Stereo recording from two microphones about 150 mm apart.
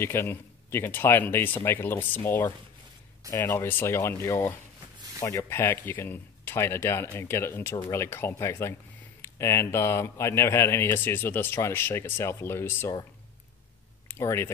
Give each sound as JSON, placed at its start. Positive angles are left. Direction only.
{"t": 0.0, "sound": "speech", "side_deg": 15}
{"t": 14.0, "sound": "speech", "side_deg": 15}